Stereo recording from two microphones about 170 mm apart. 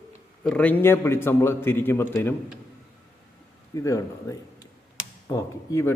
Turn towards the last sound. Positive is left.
turn(degrees=15)  # may be behind; listen again after turning